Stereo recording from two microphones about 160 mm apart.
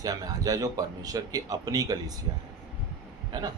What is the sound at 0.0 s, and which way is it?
A man's voice, 25° right (ahead or behind).